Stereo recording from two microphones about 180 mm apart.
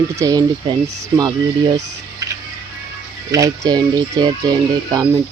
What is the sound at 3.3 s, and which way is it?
Speech, 20° right (ahead or behind).